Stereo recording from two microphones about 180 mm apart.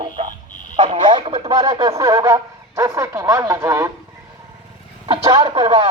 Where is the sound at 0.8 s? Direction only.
30° right (ahead or behind).